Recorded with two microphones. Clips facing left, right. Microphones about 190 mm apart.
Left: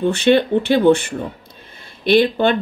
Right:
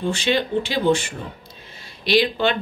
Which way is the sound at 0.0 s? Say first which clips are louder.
Left 7 dB; 60° left (ahead or behind).